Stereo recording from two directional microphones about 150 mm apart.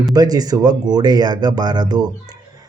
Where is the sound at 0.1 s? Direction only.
25° right (ahead or behind).